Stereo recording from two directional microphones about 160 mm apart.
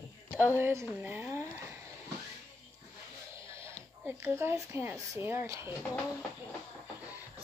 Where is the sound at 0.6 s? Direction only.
15° right (ahead or behind).